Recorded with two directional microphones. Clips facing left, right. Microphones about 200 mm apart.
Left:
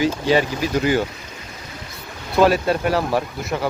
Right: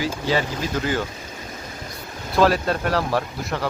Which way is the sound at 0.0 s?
20° left (ahead or behind).